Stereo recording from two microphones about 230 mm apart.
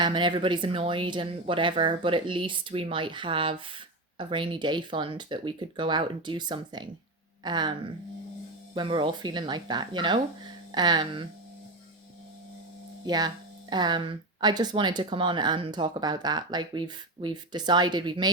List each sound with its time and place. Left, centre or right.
0.0 s speech: right
13.1 s speech: centre